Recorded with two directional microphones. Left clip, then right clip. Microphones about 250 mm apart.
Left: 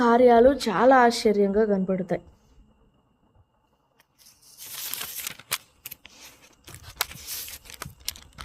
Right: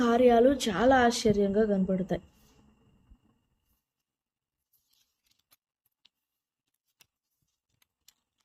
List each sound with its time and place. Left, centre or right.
0.0 s a woman's voice: centre